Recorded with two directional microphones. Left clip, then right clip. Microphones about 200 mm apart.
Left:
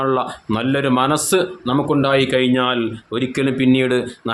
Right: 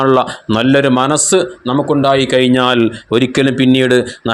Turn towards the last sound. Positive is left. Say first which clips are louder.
# right 7 dB
turn(degrees=-25)  # may be behind; listen again after turning